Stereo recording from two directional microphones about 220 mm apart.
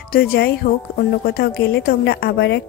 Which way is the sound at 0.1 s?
45° left (ahead or behind).